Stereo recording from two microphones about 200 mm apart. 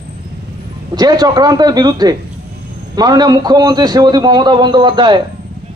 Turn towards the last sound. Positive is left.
turn(degrees=-20)  # may be behind; listen again after turning